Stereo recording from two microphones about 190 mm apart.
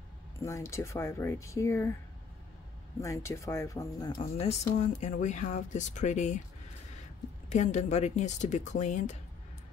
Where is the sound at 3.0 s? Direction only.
15° left (ahead or behind).